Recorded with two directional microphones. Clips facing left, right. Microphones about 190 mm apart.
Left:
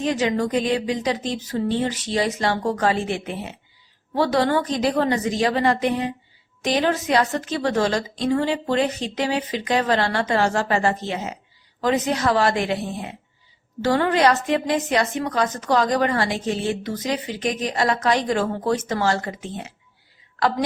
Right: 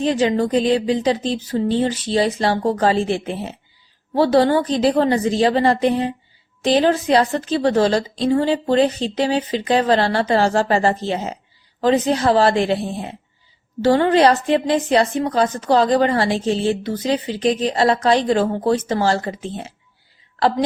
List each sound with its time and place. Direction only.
0.0 s a woman's voice: 30° right (ahead or behind)